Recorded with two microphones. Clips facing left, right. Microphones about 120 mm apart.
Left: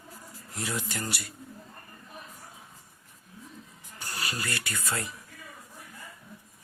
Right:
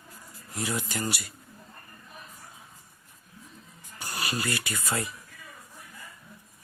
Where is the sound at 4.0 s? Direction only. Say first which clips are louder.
Right 3 dB; 15° right (ahead or behind).